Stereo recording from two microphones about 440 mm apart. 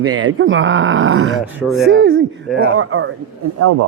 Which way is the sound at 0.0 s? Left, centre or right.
Right.